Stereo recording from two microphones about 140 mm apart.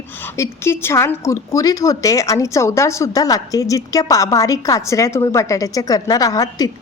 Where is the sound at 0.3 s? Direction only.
20° left (ahead or behind).